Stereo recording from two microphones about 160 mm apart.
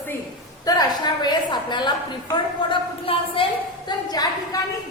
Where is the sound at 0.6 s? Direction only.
25° left (ahead or behind).